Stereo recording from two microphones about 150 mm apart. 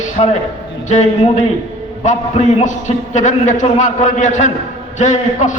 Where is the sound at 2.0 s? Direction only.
55° left (ahead or behind).